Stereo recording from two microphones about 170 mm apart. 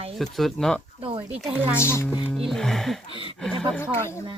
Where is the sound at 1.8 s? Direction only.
15° left (ahead or behind).